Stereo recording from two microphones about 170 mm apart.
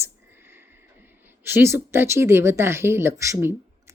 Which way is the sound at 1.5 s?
15° right (ahead or behind).